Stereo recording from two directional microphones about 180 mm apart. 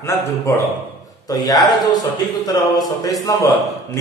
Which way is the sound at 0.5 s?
15° left (ahead or behind).